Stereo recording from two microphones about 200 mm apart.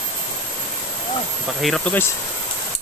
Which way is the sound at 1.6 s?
5° left (ahead or behind).